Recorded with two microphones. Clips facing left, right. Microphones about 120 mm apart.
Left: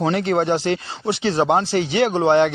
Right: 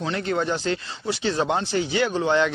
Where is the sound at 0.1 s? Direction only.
80° left.